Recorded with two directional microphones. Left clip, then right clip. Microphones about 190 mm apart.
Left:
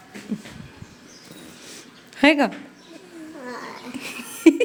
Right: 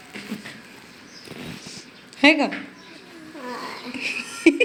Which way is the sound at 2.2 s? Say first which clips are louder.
Even; 50° left (ahead or behind).